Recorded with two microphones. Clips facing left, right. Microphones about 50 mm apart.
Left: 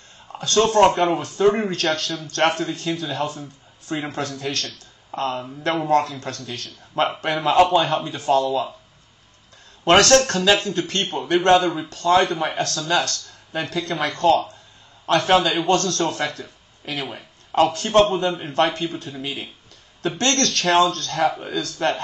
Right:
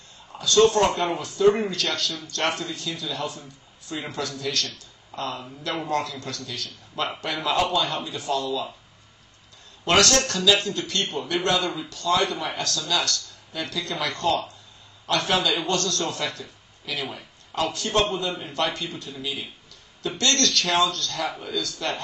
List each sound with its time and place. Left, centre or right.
0.4 s speech: left
9.8 s speech: left